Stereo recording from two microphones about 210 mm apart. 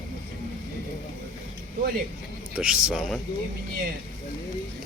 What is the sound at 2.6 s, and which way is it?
Speech, 5° right (ahead or behind).